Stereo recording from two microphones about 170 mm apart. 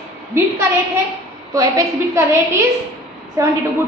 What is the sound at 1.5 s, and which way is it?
A woman's voice, 20° right (ahead or behind).